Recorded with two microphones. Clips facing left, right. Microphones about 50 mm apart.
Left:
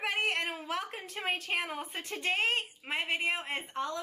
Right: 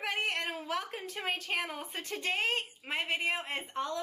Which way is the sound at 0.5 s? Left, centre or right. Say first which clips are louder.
Even; left.